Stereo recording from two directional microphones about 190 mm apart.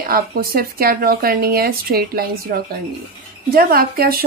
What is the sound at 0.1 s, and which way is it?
A woman's voice, 50° right (ahead or behind).